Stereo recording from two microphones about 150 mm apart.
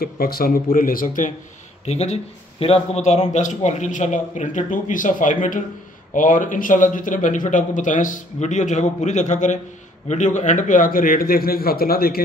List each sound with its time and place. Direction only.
0.0 s a man's voice: 80° left; by 1.3 s 60° left (ahead or behind)
1.9 s a man's voice: 45° left (ahead or behind); by 12.2 s 85° left